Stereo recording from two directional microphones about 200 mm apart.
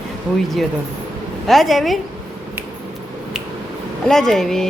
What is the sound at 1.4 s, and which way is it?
Speech, centre (ahead or behind).